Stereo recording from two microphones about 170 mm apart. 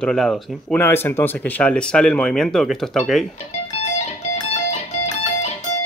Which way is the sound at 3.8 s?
40° left (ahead or behind).